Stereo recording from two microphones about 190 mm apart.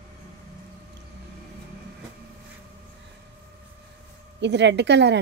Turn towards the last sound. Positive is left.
turn(degrees=-65)  # may be behind; listen again after turning